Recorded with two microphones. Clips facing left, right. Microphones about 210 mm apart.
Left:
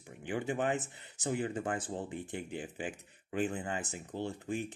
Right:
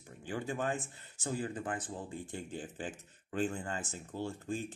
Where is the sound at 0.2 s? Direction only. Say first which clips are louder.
Left 3 dB; 20° left (ahead or behind).